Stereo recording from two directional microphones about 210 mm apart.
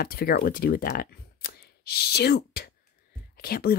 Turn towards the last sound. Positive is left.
turn(degrees=45)  # may be behind; listen again after turning